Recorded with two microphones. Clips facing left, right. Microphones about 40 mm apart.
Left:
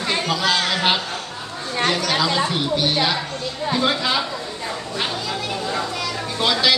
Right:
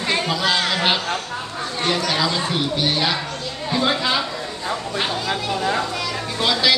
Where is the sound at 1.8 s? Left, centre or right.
Centre.